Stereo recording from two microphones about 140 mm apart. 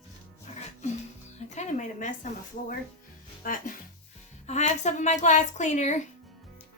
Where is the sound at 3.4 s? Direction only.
80° left.